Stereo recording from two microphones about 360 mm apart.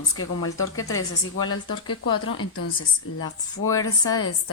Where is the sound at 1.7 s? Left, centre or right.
Left.